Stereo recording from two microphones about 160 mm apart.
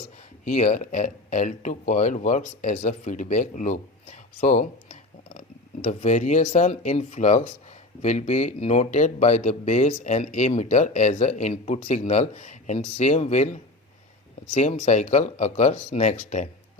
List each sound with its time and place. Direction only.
0.4 s speech: 50° left (ahead or behind)